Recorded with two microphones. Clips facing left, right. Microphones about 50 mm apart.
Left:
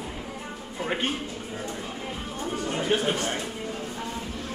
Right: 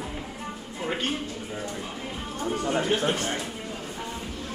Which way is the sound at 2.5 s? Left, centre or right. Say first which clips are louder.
Right 1 dB; centre.